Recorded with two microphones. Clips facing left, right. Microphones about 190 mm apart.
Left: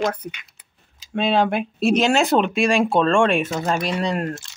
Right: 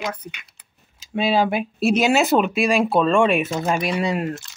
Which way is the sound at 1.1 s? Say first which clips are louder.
Even; 5° right (ahead or behind).